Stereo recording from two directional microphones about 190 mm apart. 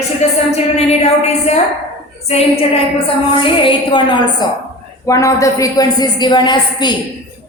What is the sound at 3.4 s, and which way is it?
Speech, 25° left (ahead or behind).